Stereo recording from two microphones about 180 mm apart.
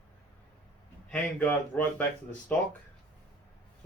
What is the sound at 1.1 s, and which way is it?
Speech, 5° left (ahead or behind).